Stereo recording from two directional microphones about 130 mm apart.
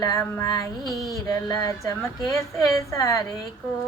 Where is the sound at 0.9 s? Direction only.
Centre (ahead or behind).